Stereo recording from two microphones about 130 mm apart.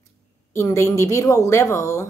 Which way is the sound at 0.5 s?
20° left (ahead or behind).